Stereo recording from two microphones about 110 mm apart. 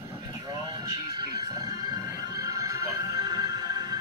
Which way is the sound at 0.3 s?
40° right (ahead or behind).